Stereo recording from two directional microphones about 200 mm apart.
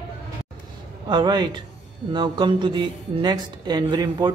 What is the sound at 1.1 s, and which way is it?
A woman's voice, 20° right (ahead or behind).